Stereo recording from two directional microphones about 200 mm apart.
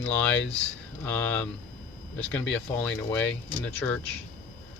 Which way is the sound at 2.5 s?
5° left (ahead or behind).